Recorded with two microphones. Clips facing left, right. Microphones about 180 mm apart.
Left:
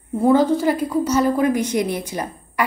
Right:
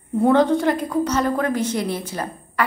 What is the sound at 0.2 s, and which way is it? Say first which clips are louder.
A woman's voice: left 1 dB; 5° left (ahead or behind).